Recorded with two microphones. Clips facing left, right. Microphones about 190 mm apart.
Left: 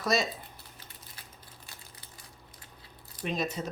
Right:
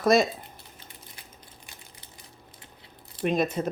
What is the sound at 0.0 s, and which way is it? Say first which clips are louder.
Speech: right 8 dB; 55° right (ahead or behind).